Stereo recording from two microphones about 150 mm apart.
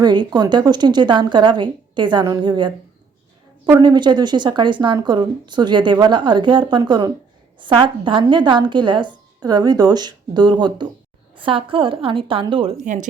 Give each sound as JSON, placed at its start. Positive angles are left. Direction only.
{"t": 0.0, "sound": "a woman's voice", "side_deg": -30}
{"t": 3.8, "sound": "a woman's voice", "side_deg": -30}
{"t": 12.8, "sound": "speech", "side_deg": -55}